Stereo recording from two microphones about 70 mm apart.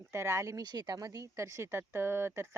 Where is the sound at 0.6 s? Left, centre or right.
Right.